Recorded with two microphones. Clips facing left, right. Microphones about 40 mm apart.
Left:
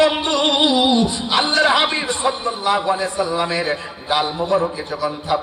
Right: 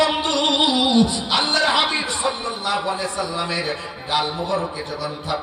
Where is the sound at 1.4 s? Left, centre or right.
Left.